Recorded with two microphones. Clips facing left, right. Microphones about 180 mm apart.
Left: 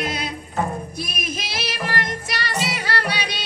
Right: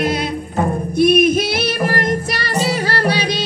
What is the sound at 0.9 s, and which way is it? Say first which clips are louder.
Music: right 18 dB; 60° right (ahead or behind).